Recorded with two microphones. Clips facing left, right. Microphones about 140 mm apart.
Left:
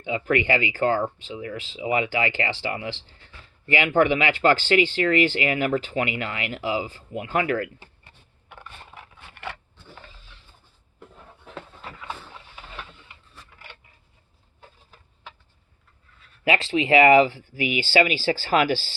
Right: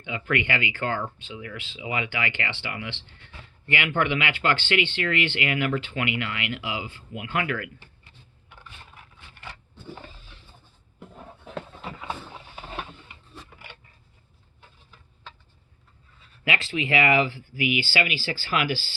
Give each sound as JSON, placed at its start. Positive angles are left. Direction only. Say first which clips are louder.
{"t": 0.0, "sound": "speech", "louder": "left 4 dB", "side_deg": 35}
{"t": 8.4, "sound": "a sound", "louder": "left 5 dB", "side_deg": 60}
{"t": 16.4, "sound": "speech", "louder": "left 6 dB", "side_deg": 35}